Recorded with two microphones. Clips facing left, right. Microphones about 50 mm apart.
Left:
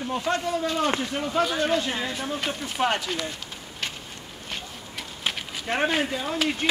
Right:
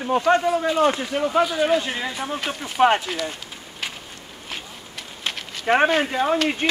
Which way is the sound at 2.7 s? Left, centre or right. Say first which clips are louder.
Right 8 dB; right.